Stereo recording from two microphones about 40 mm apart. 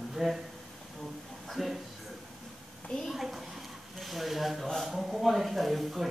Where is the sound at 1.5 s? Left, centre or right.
Centre.